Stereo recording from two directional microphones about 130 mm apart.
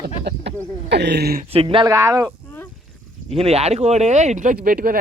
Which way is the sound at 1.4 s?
45° right (ahead or behind).